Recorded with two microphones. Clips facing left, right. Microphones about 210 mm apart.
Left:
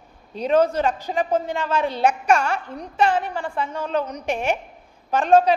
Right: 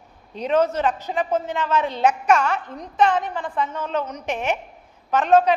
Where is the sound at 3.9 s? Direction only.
35° left (ahead or behind).